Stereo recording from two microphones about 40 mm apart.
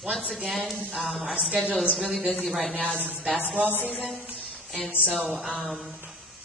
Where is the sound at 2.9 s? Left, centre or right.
Right.